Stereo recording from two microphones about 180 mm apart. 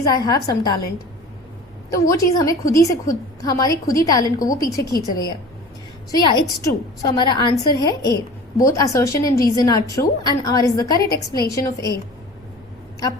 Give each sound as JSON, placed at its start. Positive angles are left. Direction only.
{"t": 0.0, "sound": "a woman's voice", "side_deg": 20}
{"t": 1.9, "sound": "a woman's voice", "side_deg": 20}